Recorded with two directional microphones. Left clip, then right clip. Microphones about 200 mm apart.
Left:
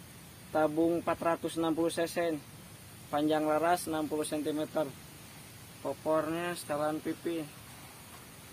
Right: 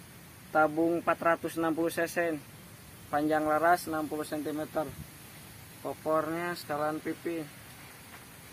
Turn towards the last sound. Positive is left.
turn(degrees=10)  # may be behind; listen again after turning